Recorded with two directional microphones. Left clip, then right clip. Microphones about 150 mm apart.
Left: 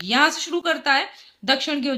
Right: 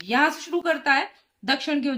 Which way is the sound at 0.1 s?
35° left (ahead or behind).